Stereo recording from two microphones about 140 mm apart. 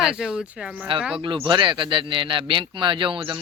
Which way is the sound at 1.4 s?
35° right (ahead or behind).